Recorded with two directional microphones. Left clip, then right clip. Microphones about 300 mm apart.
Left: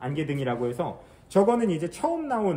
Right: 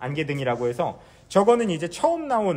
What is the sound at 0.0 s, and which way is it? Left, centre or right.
A man's voice, right.